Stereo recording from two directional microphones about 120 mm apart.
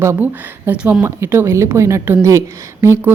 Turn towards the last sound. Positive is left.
turn(degrees=-20)  # may be behind; listen again after turning